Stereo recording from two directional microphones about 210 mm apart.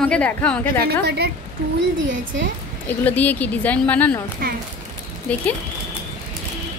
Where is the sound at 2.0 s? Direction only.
60° right (ahead or behind).